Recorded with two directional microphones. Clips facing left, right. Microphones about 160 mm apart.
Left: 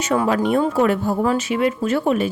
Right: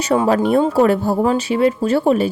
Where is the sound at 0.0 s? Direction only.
35° right (ahead or behind).